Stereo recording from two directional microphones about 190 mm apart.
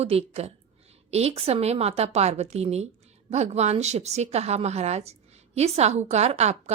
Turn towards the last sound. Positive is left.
turn(degrees=-35)  # may be behind; listen again after turning